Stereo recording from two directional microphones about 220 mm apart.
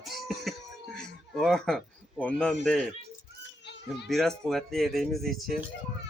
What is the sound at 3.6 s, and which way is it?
Children playing, 50° left (ahead or behind).